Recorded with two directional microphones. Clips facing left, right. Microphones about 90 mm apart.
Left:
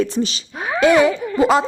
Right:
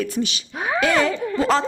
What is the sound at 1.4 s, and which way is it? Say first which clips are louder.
Speech: left 5 dB; 15° left (ahead or behind).